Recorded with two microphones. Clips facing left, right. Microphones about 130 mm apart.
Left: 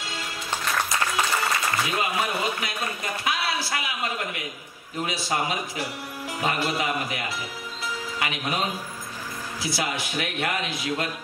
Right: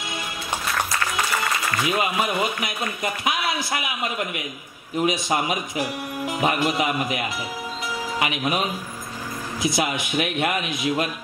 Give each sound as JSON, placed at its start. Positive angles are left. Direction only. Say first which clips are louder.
{"t": 1.9, "sound": "speech", "louder": "right 3 dB", "side_deg": -15}